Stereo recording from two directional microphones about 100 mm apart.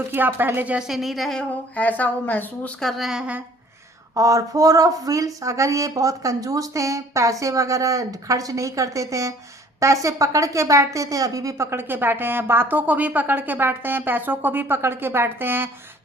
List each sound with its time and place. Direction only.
0.1 s a woman's voice: 20° right (ahead or behind)
0.9 s a woman's voice: centre (ahead or behind); by 2.7 s 15° left (ahead or behind)
2.8 s speech: centre (ahead or behind)
4.1 s a woman's voice: 35° right (ahead or behind)